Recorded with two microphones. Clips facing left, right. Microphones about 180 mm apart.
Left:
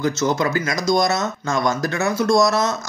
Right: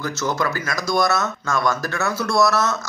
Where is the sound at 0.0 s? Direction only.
20° left (ahead or behind).